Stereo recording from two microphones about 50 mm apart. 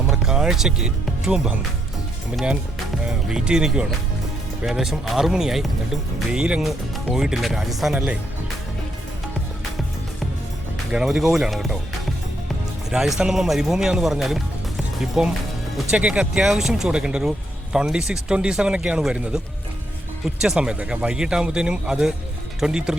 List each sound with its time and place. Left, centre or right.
0.1 s speech: centre
3.1 s speech: centre
6.6 s speech: centre
7.9 s speech: right
11.0 s speech: centre
12.9 s speech: right
13.3 s speech: centre
16.9 s speech: centre
20.6 s speech: right